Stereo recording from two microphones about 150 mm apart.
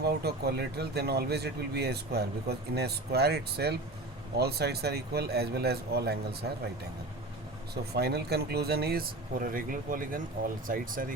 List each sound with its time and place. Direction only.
0.0 s speech: 90° right
7.9 s speech: 90° right; by 11.1 s 65° right (ahead or behind)